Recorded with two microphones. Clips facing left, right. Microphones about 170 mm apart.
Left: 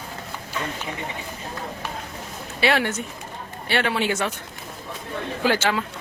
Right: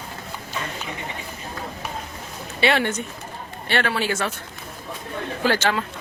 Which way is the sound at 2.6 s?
Centre (ahead or behind).